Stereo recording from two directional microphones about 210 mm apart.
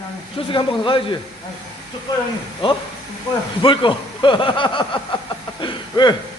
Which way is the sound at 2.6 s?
25° left (ahead or behind).